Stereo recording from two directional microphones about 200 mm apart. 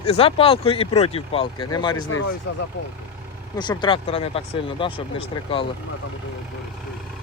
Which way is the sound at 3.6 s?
20° left (ahead or behind).